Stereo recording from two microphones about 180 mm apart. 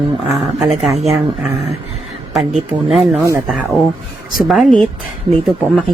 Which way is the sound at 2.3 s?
Centre (ahead or behind).